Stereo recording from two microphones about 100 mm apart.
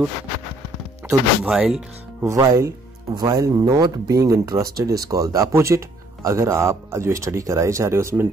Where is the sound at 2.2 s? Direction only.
30° right (ahead or behind).